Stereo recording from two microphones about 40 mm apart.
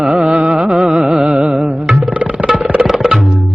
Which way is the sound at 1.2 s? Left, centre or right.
Right.